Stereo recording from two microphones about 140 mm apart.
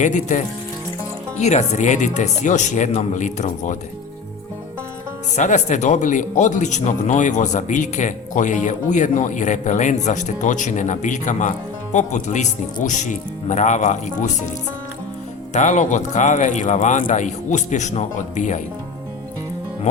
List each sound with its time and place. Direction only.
0.0 s speech: 60° left (ahead or behind)
5.4 s speech: 60° left (ahead or behind)
15.5 s speech: 60° left (ahead or behind)